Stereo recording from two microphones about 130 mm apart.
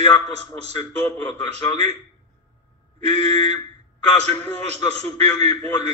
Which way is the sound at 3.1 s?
55° right (ahead or behind).